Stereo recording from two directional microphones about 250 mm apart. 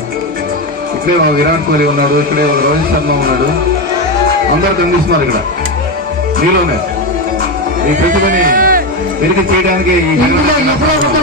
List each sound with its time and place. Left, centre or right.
7.9 s speech: right